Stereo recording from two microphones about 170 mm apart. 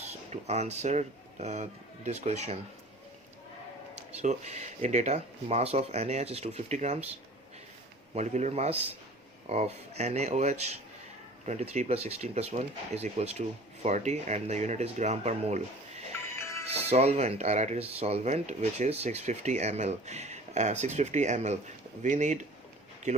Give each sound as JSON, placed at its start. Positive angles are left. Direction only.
{"t": 0.3, "sound": "speech", "side_deg": -40}
{"t": 4.2, "sound": "speech", "side_deg": -40}
{"t": 8.1, "sound": "speech", "side_deg": -45}
{"t": 16.1, "sound": "music", "side_deg": 15}
{"t": 16.9, "sound": "speech", "side_deg": -40}